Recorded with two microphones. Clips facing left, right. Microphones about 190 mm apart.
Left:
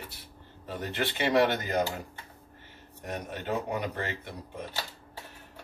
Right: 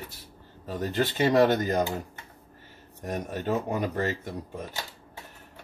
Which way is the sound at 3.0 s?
45° right (ahead or behind).